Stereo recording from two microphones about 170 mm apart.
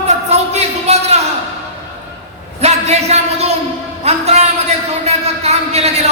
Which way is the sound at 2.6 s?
40° right (ahead or behind).